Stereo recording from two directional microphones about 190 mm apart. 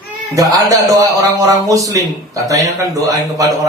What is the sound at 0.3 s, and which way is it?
Speech, 20° right (ahead or behind).